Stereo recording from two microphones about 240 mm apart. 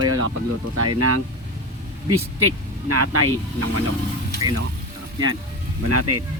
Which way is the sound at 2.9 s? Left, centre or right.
Right.